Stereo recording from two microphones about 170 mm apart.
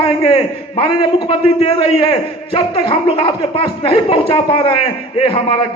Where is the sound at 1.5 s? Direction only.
30° left (ahead or behind).